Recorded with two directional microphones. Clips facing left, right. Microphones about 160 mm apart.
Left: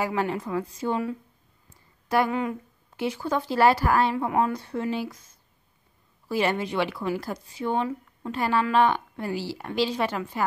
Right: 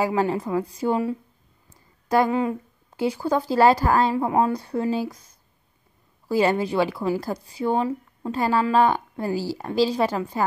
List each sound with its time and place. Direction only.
0.1 s speech: 35° right (ahead or behind)
3.0 s speech: 35° right (ahead or behind)